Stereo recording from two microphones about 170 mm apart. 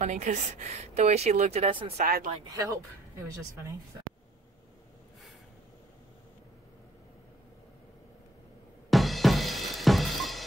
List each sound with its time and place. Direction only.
0.0 s a woman's voice: 45° right (ahead or behind)
2.0 s speech: 60° right (ahead or behind)
2.4 s speech: 20° right (ahead or behind)
8.9 s drum kit: centre (ahead or behind)